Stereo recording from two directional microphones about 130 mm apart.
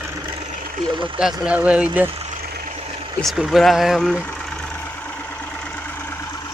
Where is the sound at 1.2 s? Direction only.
5° right (ahead or behind).